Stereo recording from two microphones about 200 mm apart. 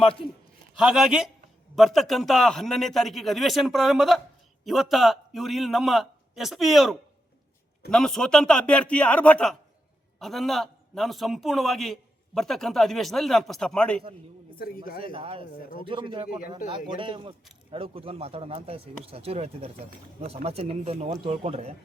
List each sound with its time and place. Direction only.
0.0 s a man's voice: 25° left (ahead or behind)
0.8 s a man's voice: centre (ahead or behind)
15.1 s speech: 30° right (ahead or behind)